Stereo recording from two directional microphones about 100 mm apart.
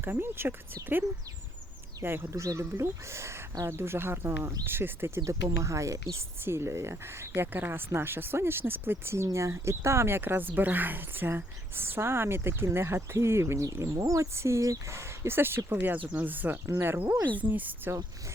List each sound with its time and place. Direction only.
0.0 s speech: 20° right (ahead or behind)